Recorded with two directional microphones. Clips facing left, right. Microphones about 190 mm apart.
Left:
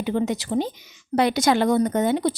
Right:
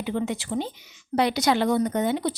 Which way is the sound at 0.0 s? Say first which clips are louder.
Left 4 dB; 40° left (ahead or behind).